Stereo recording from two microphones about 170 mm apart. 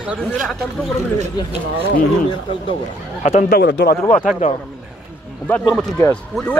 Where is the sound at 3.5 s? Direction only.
75° left (ahead or behind).